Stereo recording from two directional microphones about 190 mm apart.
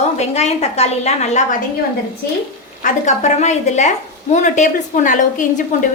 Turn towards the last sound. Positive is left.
turn(degrees=40)  # may be behind; listen again after turning